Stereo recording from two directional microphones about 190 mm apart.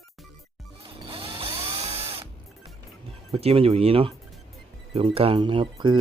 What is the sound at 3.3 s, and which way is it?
Speech, 30° right (ahead or behind).